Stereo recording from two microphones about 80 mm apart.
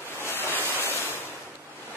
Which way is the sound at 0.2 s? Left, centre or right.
Left.